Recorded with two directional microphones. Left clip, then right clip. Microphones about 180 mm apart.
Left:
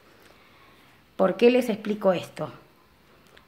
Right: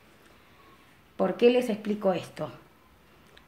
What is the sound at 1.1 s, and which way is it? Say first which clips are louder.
A woman's voice: left 3 dB; 30° left (ahead or behind).